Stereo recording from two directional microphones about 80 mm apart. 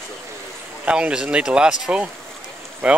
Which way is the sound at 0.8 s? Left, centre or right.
Centre.